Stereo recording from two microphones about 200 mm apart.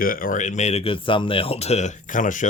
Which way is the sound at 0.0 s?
45° left (ahead or behind).